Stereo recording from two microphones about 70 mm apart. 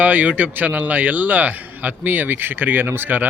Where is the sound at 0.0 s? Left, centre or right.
Right.